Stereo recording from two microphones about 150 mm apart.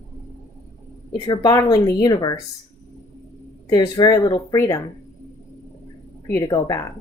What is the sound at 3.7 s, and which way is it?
Speech, 25° left (ahead or behind).